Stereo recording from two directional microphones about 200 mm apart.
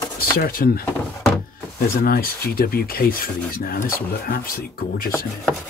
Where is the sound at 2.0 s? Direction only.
50° left (ahead or behind).